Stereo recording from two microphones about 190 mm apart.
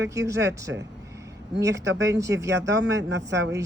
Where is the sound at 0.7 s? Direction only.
90° right.